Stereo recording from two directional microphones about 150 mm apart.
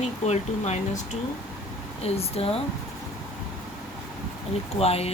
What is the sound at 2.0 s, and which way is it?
Speech, 40° left (ahead or behind).